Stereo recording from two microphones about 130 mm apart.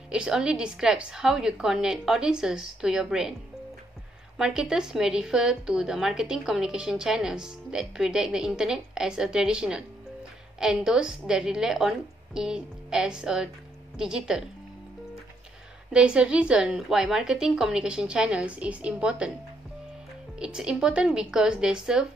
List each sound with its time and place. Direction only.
0.1 s a woman's voice: 5° right (ahead or behind)
4.4 s a woman's voice: 5° right (ahead or behind)
15.9 s a woman's voice: 10° right (ahead or behind)
20.3 s a woman's voice: 5° right (ahead or behind)